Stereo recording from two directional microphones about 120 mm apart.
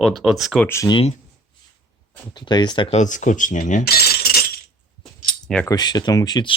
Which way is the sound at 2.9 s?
90° left.